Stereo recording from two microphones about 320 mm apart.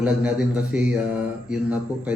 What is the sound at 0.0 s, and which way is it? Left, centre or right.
Mantra, centre.